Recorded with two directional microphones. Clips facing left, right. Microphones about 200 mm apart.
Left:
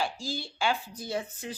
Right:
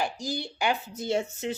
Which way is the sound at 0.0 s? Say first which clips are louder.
Right 2 dB; 15° right (ahead or behind).